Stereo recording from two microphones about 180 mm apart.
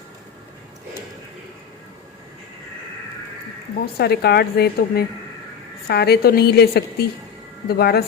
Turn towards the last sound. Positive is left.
turn(degrees=60)  # may be behind; listen again after turning